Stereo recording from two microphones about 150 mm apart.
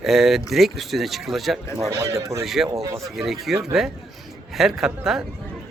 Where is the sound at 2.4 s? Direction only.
Centre (ahead or behind).